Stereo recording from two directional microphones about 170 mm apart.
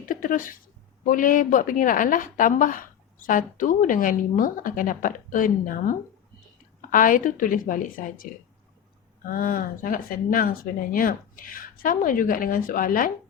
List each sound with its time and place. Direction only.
0.0 s a woman's voice: 55° left (ahead or behind)
9.3 s speech: 55° left (ahead or behind)